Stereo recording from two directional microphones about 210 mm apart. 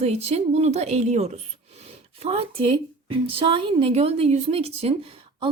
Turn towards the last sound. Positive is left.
turn(degrees=-25)  # may be behind; listen again after turning